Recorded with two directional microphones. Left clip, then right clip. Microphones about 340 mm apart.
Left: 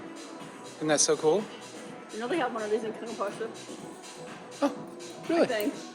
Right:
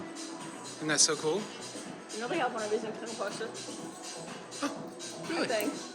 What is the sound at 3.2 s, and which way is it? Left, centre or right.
Speech, centre.